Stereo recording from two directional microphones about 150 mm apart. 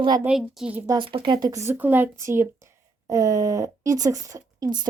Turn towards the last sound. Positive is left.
turn(degrees=-25)  # may be behind; listen again after turning